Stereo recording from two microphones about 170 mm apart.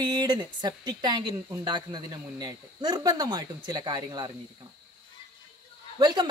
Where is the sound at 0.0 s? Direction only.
25° right (ahead or behind).